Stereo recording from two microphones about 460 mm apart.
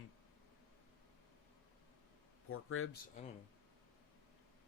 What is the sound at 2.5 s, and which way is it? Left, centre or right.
Speech, left.